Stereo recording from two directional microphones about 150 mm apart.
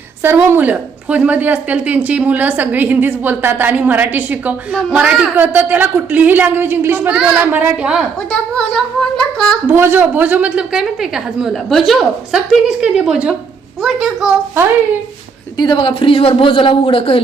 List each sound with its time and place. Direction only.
0.2 s a woman's voice: 15° right (ahead or behind)
8.3 s a woman's voice: 5° left (ahead or behind)
9.6 s a woman's voice: 15° right (ahead or behind)
15.5 s speech: 30° left (ahead or behind)